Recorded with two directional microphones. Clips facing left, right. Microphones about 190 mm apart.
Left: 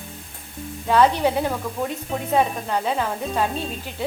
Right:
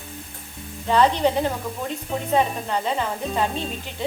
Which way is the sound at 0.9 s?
10° left (ahead or behind).